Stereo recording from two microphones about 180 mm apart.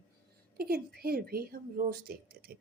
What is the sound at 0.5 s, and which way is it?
A woman's voice, 60° right (ahead or behind).